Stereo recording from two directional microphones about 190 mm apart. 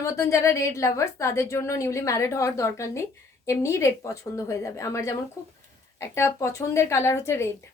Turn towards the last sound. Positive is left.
turn(degrees=15)  # may be behind; listen again after turning